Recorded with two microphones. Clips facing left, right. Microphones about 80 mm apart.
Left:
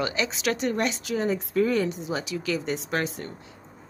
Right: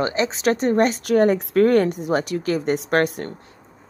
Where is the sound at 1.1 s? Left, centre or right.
Right.